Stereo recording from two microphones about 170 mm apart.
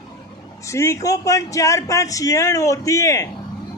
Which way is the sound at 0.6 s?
15° left (ahead or behind).